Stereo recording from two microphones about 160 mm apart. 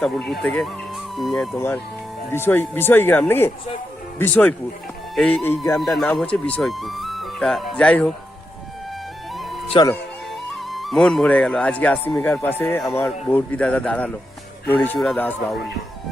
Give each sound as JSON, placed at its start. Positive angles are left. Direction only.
{"t": 0.0, "sound": "speech", "side_deg": 5}
{"t": 1.5, "sound": "speech", "side_deg": 15}
{"t": 5.8, "sound": "speech", "side_deg": 0}
{"t": 9.3, "sound": "music", "side_deg": 0}
{"t": 9.6, "sound": "speech", "side_deg": 30}
{"t": 10.5, "sound": "speech", "side_deg": 0}